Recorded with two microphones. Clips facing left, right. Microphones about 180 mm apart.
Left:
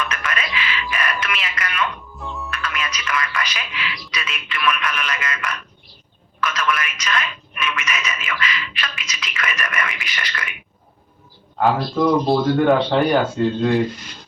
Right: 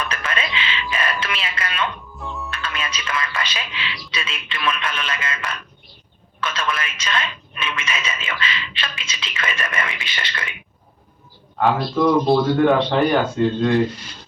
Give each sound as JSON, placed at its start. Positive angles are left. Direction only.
{"t": 0.0, "sound": "music", "side_deg": -30}
{"t": 2.1, "sound": "music", "side_deg": 0}
{"t": 2.5, "sound": "speech", "side_deg": -30}
{"t": 11.5, "sound": "speech", "side_deg": 0}